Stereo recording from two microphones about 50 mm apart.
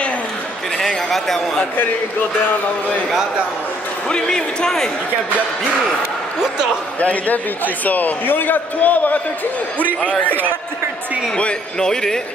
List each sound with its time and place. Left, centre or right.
0.7 s speech: centre
4.1 s speech: centre
7.0 s a man's voice: left
11.3 s speech: centre